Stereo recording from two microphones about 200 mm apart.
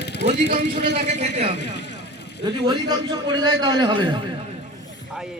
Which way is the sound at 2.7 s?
20° right (ahead or behind).